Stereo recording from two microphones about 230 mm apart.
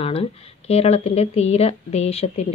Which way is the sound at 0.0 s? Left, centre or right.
Left.